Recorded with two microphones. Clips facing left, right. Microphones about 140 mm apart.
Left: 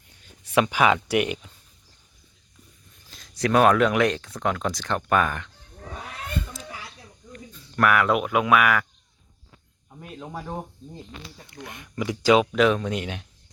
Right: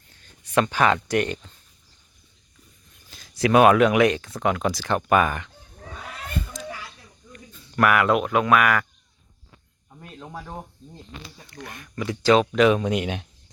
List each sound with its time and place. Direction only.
0.1 s speech: 10° left (ahead or behind)
3.1 s speech: centre (ahead or behind)
6.5 s a sound: 5° left (ahead or behind)
7.5 s speech: 5° right (ahead or behind)
10.0 s speech: 10° left (ahead or behind)
11.4 s speech: 20° left (ahead or behind)
12.5 s speech: 5° right (ahead or behind)
12.8 s speech: 15° right (ahead or behind)